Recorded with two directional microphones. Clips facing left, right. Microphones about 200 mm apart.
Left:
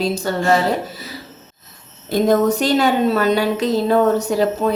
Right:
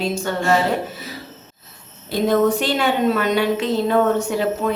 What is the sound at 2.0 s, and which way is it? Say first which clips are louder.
Speech: left 2 dB; 45° left (ahead or behind).